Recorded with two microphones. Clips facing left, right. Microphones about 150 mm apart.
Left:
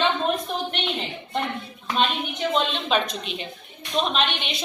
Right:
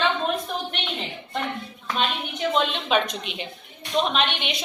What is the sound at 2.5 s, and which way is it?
A woman's voice, 15° right (ahead or behind).